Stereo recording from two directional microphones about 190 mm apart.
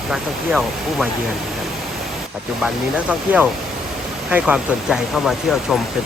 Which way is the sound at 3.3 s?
10° right (ahead or behind).